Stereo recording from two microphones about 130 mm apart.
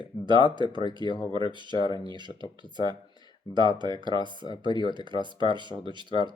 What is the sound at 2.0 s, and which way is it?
Speech, 35° right (ahead or behind).